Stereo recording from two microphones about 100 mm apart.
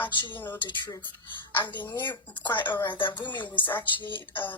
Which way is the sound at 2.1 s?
50° left (ahead or behind).